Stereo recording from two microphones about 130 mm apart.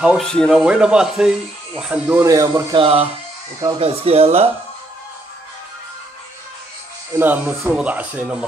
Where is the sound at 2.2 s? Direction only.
25° right (ahead or behind).